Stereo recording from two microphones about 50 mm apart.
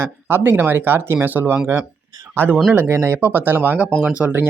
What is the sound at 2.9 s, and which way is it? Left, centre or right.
Speech, right.